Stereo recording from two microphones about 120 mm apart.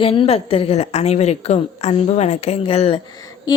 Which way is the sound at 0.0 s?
50° left (ahead or behind).